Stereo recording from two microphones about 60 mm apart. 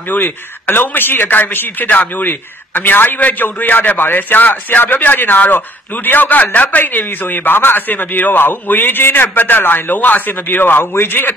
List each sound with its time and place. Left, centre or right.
0.1 s a man's voice: left